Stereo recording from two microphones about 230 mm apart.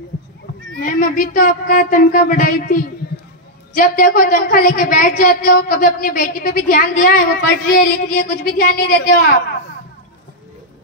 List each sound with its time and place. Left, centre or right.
0.7 s a woman's voice: left